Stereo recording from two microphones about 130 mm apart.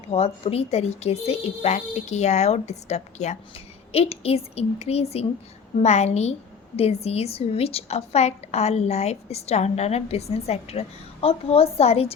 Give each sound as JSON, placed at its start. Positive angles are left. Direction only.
{"t": 0.1, "sound": "a woman's voice", "side_deg": 50}